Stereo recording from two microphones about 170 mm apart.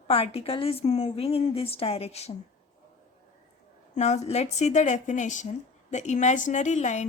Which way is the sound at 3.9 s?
40° left (ahead or behind).